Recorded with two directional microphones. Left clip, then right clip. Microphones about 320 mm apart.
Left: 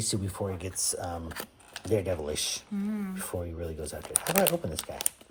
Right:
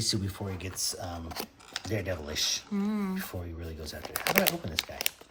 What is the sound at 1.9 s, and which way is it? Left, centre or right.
Speech, left.